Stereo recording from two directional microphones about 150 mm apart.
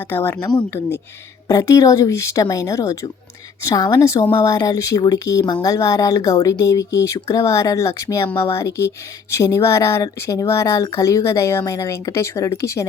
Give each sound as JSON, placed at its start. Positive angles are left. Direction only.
{"t": 0.0, "sound": "a woman's voice", "side_deg": 15}